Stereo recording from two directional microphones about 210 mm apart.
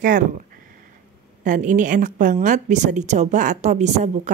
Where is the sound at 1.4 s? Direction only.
35° right (ahead or behind).